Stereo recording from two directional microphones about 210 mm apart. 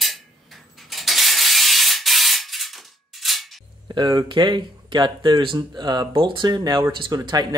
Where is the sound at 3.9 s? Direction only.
20° right (ahead or behind).